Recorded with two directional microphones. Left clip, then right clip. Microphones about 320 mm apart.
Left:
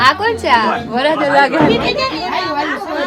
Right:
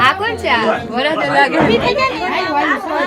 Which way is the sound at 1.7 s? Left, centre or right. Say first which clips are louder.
Right 1 dB; centre.